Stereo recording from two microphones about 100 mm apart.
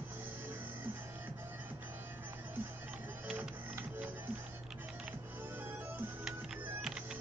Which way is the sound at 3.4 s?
15° right (ahead or behind).